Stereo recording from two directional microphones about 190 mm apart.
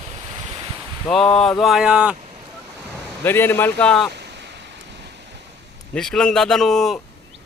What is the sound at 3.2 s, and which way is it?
Speech, 10° left (ahead or behind).